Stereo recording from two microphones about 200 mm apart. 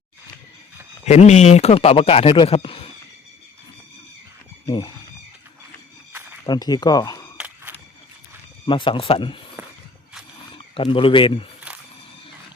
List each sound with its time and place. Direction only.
1.0 s a man's voice: 35° left (ahead or behind)
4.6 s speech: 20° left (ahead or behind)
6.4 s a man's voice: 20° left (ahead or behind)
7.3 s a sound: 5° right (ahead or behind)
8.6 s a man's voice: 25° left (ahead or behind)
10.5 s speech: 25° left (ahead or behind)